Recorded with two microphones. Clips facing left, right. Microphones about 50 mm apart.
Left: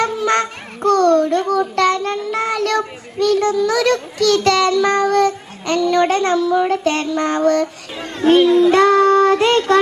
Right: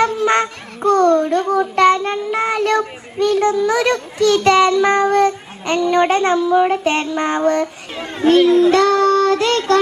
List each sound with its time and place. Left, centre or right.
0.0 s a child's voice: right
8.7 s child singing: centre